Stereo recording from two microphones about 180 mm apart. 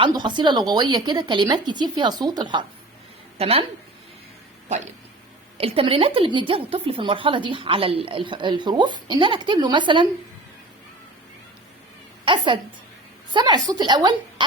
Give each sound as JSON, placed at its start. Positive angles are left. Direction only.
{"t": 0.0, "sound": "a woman's voice", "side_deg": -25}
{"t": 4.7, "sound": "a woman's voice", "side_deg": -40}
{"t": 12.2, "sound": "a woman's voice", "side_deg": -25}